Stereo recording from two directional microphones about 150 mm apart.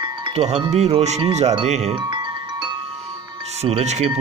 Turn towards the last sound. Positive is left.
turn(degrees=-45)  # may be behind; listen again after turning